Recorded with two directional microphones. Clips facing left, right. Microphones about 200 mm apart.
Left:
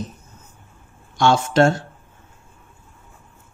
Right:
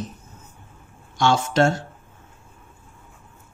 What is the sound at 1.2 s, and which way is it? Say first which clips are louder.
Speech: left 3 dB; 55° left (ahead or behind).